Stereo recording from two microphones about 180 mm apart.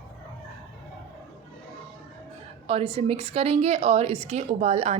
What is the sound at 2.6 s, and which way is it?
A woman's voice, 30° right (ahead or behind).